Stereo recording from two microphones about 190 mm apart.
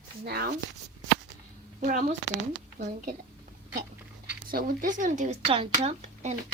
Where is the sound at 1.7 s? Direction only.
40° right (ahead or behind).